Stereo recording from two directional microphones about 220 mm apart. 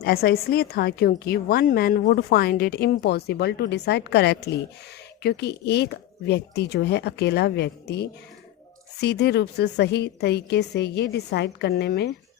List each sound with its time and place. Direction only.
0.0 s a woman's voice: 45° left (ahead or behind)